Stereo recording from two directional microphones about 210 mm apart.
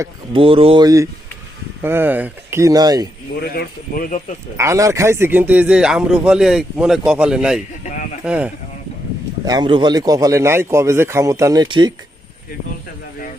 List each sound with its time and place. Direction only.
0.3 s a man's voice: 25° right (ahead or behind)
3.4 s speech: 45° left (ahead or behind)
4.5 s a man's voice: 15° right (ahead or behind)
9.4 s a man's voice: 20° right (ahead or behind)